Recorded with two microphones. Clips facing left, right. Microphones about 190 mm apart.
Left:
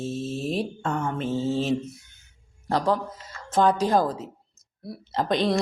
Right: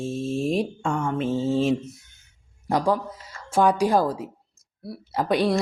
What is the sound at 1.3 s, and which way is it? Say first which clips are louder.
Speech: right 3 dB; 10° right (ahead or behind).